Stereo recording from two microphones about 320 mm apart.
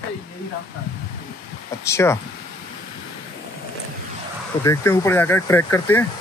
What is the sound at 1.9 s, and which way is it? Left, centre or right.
Speech, centre.